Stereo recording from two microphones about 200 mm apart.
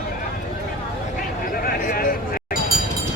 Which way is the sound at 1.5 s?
45° left (ahead or behind).